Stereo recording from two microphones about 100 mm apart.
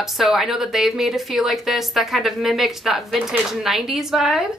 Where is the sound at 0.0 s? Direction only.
5° right (ahead or behind).